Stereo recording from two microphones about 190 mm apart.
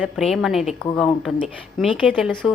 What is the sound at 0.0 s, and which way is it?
Speech, centre (ahead or behind).